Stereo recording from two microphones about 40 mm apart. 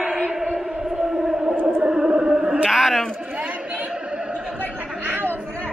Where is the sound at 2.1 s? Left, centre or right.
Right.